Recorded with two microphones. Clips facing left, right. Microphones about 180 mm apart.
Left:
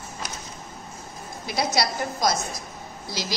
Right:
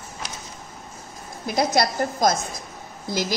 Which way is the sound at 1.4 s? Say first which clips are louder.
Right 4 dB; 50° right (ahead or behind).